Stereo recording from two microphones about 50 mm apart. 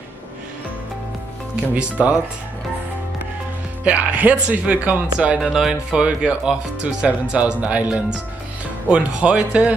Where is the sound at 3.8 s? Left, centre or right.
Right.